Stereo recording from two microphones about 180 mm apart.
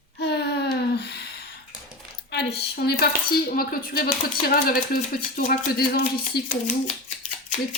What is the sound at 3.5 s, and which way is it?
Speech, 50° left (ahead or behind).